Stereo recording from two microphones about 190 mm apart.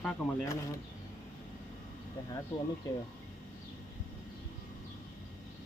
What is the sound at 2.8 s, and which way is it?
Speech, 20° left (ahead or behind).